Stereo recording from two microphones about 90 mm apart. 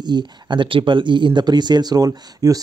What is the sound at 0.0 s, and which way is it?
Speech, 55° right (ahead or behind).